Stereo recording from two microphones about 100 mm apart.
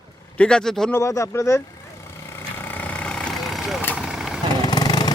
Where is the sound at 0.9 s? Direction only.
30° left (ahead or behind).